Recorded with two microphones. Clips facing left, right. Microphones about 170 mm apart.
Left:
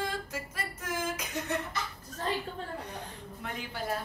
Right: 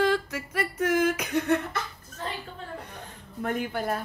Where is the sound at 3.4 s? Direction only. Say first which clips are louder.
Right 9 dB; 55° right (ahead or behind).